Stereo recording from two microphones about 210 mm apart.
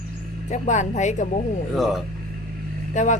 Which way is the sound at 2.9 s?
35° left (ahead or behind).